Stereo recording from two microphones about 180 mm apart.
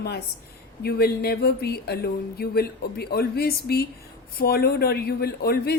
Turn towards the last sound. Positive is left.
turn(degrees=60)  # may be behind; listen again after turning